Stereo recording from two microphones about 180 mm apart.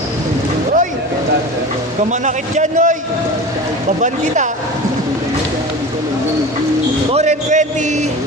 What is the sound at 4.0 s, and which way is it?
Speech, 45° right (ahead or behind).